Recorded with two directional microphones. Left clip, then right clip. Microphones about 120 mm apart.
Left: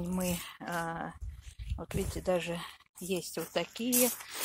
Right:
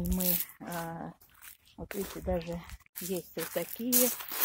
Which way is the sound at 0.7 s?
10° left (ahead or behind).